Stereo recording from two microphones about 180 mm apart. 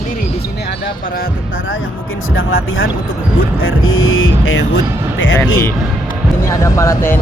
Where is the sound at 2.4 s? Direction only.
90° left.